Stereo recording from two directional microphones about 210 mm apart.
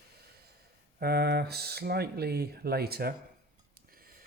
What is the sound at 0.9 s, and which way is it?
Speech, 50° right (ahead or behind).